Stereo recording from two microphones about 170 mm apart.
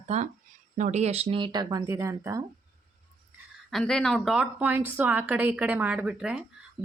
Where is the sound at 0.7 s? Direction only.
45° right (ahead or behind); by 2.4 s 20° right (ahead or behind).